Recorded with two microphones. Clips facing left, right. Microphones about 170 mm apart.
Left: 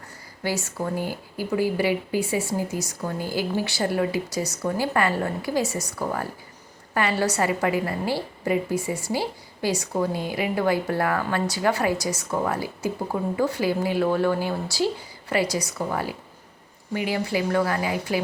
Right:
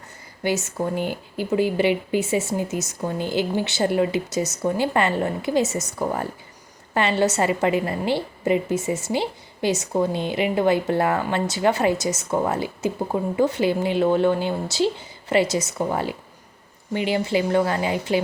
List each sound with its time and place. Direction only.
0.4 s a woman's voice: 20° right (ahead or behind)